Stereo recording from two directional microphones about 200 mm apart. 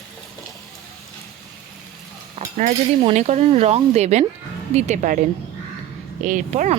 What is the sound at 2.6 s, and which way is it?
Speech, 35° right (ahead or behind).